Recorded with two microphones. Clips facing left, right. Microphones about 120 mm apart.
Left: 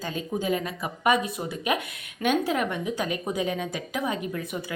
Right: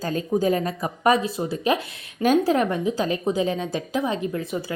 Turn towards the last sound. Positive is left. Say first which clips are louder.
# right 4 dB
turn(degrees=-30)  # may be behind; listen again after turning